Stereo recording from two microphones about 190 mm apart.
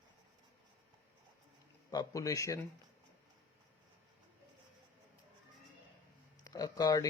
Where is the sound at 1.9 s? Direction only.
20° left (ahead or behind).